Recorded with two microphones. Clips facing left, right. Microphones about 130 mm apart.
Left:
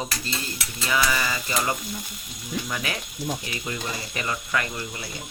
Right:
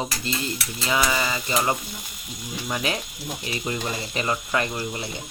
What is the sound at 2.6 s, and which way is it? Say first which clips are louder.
Speech: right 4 dB; 25° right (ahead or behind).